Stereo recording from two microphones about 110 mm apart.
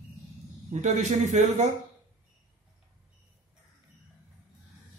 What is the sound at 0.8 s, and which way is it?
Speech, 90° right.